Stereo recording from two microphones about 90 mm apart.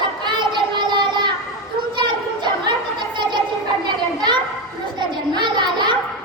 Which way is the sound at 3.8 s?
50° right (ahead or behind).